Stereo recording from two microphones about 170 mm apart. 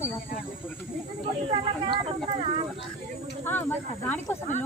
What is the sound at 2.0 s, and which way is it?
Speech, 40° right (ahead or behind).